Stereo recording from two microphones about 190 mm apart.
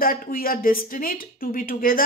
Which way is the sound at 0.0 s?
50° left (ahead or behind).